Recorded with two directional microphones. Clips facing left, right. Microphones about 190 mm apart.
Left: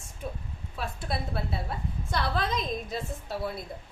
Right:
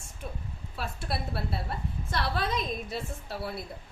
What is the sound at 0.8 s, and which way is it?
A woman's voice, centre (ahead or behind).